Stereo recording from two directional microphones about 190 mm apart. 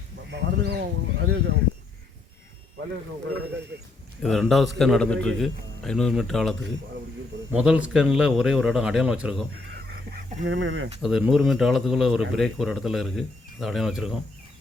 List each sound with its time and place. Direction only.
0.3 s speech: 60° right (ahead or behind)
4.2 s speech: centre (ahead or behind)
10.4 s speech: 85° right
11.0 s speech: centre (ahead or behind)